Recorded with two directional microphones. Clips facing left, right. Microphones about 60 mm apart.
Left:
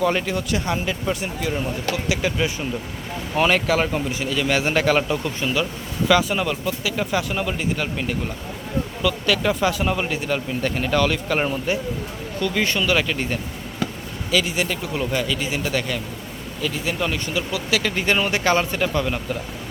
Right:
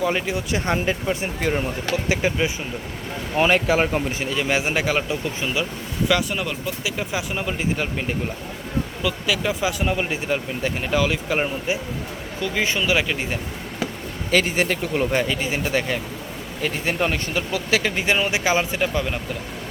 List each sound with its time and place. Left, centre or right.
0.0 s speech: centre
0.5 s speech: right
2.0 s speech: right
6.1 s speech: centre
7.8 s speech: right
9.0 s speech: centre
10.1 s speech: centre
14.3 s speech: right
16.6 s speech: right
17.8 s speech: centre